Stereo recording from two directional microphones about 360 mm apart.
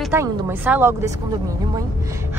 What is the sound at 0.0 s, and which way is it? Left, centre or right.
A woman's voice, centre.